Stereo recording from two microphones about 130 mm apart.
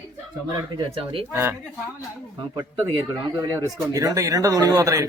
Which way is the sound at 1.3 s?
20° right (ahead or behind).